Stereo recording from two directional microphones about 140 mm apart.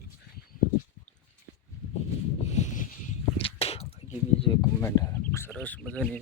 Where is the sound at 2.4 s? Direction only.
55° left (ahead or behind).